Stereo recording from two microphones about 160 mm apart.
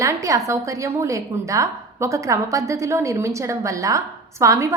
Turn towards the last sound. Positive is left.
turn(degrees=-20)  # may be behind; listen again after turning